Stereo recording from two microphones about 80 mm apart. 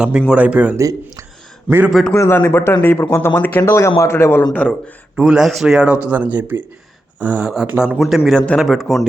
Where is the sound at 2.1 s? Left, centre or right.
Left.